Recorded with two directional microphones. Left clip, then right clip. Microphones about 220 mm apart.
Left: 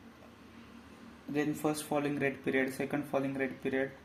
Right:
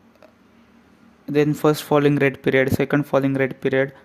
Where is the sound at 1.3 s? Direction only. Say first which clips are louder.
Right 15 dB; 50° right (ahead or behind).